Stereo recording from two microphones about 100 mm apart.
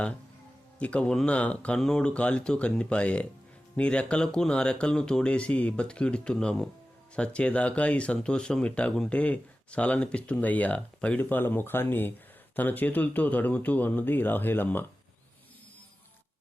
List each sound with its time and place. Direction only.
0.8 s speech: 10° left (ahead or behind)